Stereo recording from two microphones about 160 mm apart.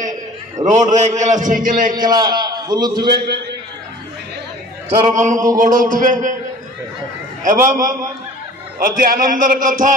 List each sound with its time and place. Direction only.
0.7 s a man's voice: 50° right (ahead or behind)
2.0 s a man's voice: 25° right (ahead or behind)
5.1 s a man's voice: 50° right (ahead or behind)
7.4 s a man's voice: 55° right (ahead or behind)